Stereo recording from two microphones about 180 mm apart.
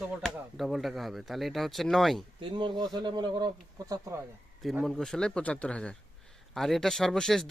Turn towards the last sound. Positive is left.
turn(degrees=0)  # may be behind; listen again after turning